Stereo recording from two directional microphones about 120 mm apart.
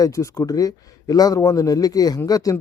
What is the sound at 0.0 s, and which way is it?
Speech, 25° left (ahead or behind).